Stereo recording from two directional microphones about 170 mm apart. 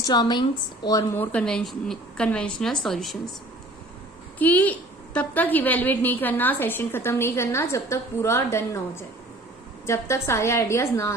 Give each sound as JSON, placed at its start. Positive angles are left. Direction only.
{"t": 0.0, "sound": "a woman's voice", "side_deg": 25}
{"t": 4.4, "sound": "a woman's voice", "side_deg": 10}